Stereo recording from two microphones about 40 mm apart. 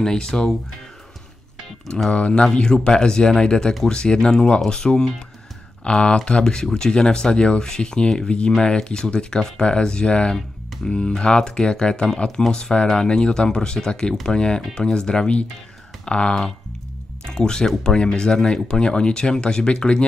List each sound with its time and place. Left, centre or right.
0.0 s speech: centre
2.0 s speech: left